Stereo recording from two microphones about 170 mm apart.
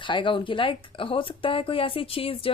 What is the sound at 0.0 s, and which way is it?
Speech, 30° left (ahead or behind).